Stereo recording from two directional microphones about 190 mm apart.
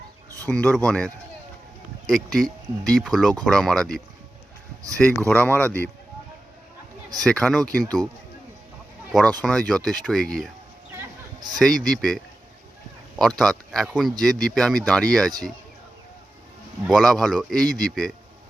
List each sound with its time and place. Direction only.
0.4 s speech: 5° left (ahead or behind)
5.3 s speech: 10° left (ahead or behind)
7.2 s speech: 5° left (ahead or behind)
9.4 s speech: 5° left (ahead or behind)
11.3 s a sound: 20° right (ahead or behind)
11.6 s speech: centre (ahead or behind)
13.4 s speech: centre (ahead or behind)
16.8 s speech: centre (ahead or behind)